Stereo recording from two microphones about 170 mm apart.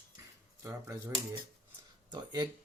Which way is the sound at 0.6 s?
15° right (ahead or behind).